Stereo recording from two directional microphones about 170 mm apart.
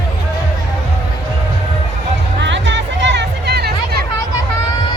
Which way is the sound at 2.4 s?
90° right.